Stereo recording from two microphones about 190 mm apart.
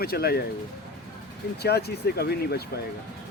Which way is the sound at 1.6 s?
60° left (ahead or behind).